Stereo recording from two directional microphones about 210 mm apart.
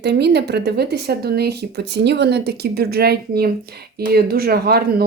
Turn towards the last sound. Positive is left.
turn(degrees=-50)  # may be behind; listen again after turning